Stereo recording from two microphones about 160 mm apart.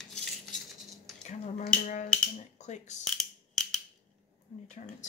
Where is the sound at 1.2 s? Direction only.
45° left (ahead or behind).